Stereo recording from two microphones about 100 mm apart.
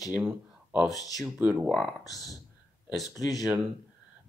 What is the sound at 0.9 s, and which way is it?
Speech, 40° left (ahead or behind).